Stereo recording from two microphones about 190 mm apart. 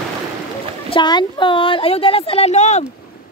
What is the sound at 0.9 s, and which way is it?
A woman's voice, 25° left (ahead or behind).